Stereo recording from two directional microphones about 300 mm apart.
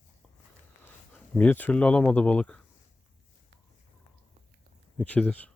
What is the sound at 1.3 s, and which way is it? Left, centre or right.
Speech, centre.